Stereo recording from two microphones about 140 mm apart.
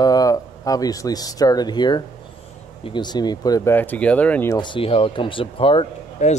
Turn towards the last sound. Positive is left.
turn(degrees=60)  # may be behind; listen again after turning